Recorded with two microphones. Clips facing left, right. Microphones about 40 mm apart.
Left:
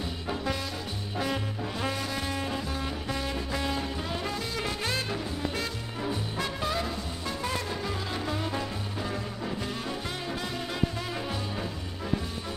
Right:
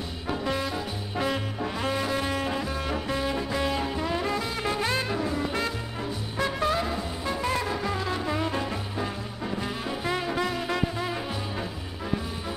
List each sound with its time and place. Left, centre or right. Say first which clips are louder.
0.3 s music: right 4 dB; centre
1.1 s swing music: right 3 dB; centre
1.8 s music: right 5 dB; centre
6.3 s music: right 9 dB; centre
8.3 s music: right 4 dB; right